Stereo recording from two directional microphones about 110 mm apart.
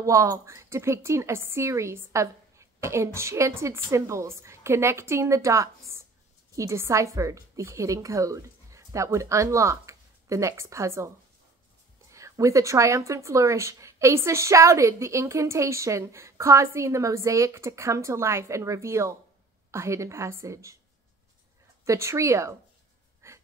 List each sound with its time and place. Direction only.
0.0 s a woman's voice: 30° right (ahead or behind)
12.1 s speech: 30° right (ahead or behind)
21.8 s speech: 25° right (ahead or behind)
23.2 s wheeze: 25° right (ahead or behind)